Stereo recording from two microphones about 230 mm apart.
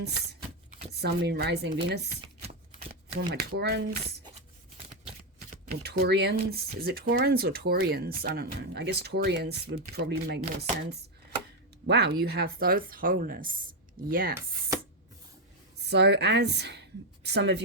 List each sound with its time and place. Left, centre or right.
0.0 s a sound: right
1.0 s speech: right
3.2 s speech: right
5.8 s a woman's voice: right
15.9 s a woman's voice: right